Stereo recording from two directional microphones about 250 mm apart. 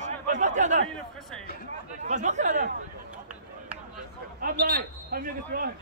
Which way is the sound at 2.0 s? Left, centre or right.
Right.